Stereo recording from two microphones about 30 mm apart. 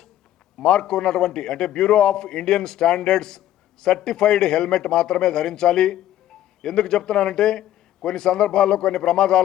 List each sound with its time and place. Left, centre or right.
0.6 s a man's voice: left